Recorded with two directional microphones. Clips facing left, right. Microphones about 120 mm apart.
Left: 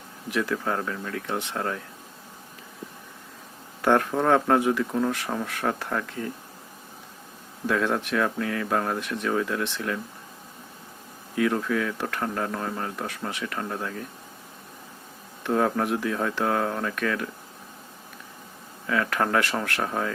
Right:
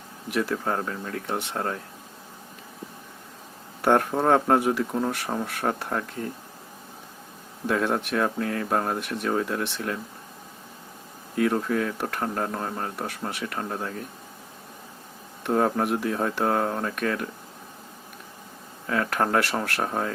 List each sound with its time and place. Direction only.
0.3 s speech: 30° right (ahead or behind)
3.8 s speech: 35° right (ahead or behind)
7.7 s speech: 30° right (ahead or behind)
11.5 s speech: 35° right (ahead or behind)
15.4 s speech: 30° right (ahead or behind)
18.9 s speech: 35° right (ahead or behind)